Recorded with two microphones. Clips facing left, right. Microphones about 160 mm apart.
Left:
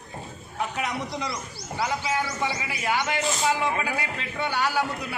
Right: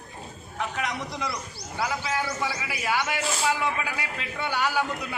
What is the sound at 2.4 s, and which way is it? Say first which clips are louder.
A man's voice: left 2 dB; 5° right (ahead or behind).